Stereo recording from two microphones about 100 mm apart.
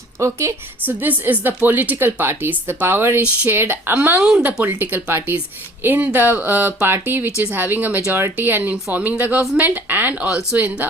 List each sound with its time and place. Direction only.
0.2 s a woman's voice: 30° right (ahead or behind)
7.3 s speech: 30° left (ahead or behind)
7.5 s a woman's voice: 20° right (ahead or behind)